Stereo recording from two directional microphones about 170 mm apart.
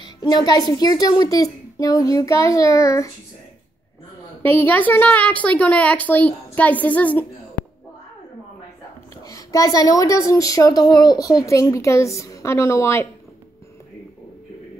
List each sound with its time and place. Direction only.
0.0 s a child's voice: 25° left (ahead or behind)
4.4 s a woman's voice: 15° left (ahead or behind)
9.2 s a child's voice: 20° left (ahead or behind)